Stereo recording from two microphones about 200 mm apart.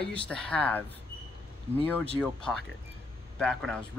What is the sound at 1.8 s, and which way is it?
Speech, 5° left (ahead or behind).